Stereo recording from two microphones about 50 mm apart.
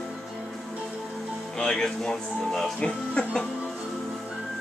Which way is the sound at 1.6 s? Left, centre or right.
Centre.